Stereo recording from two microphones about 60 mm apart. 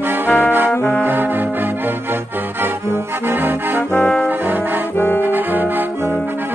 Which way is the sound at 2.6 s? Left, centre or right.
Right.